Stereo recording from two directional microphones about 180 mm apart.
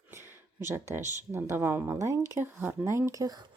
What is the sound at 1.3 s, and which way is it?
Speech, 15° right (ahead or behind).